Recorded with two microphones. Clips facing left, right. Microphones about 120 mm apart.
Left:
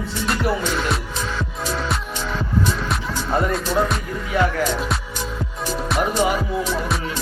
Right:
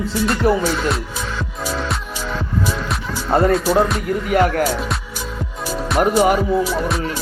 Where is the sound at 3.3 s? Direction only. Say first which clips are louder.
Right 6 dB; 40° right (ahead or behind).